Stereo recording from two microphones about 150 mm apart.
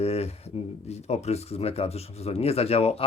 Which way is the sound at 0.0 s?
45° left (ahead or behind).